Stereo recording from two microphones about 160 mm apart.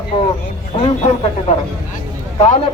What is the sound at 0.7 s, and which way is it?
Speech, 40° left (ahead or behind).